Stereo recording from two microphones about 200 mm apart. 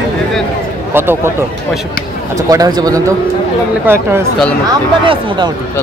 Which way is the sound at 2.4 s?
15° right (ahead or behind).